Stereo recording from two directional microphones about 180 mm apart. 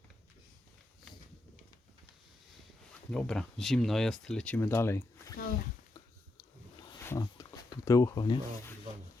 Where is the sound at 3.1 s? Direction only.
5° left (ahead or behind).